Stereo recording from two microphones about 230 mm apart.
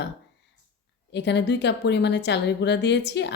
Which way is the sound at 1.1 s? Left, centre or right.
Left.